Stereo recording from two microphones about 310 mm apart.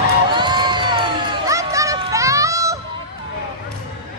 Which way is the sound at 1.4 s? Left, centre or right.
Centre.